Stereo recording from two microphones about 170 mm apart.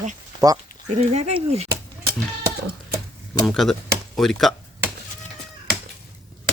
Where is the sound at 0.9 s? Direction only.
40° right (ahead or behind).